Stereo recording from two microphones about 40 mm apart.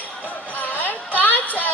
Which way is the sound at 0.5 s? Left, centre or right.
Left.